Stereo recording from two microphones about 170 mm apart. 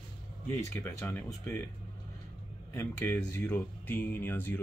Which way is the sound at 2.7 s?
10° left (ahead or behind).